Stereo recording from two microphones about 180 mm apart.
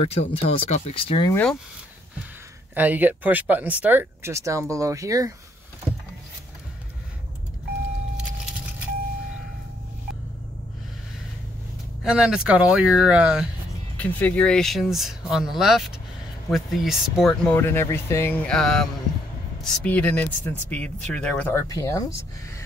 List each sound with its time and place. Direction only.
0.0 s speech: 35° left (ahead or behind)
1.3 s speech: 5° left (ahead or behind)
2.7 s speech: 10° right (ahead or behind)
12.0 s speech: 5° right (ahead or behind)
13.9 s speech: 10° left (ahead or behind)
17.6 s speech: 15° left (ahead or behind)